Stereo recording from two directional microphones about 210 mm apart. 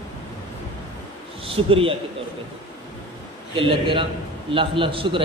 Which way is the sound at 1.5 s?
25° right (ahead or behind).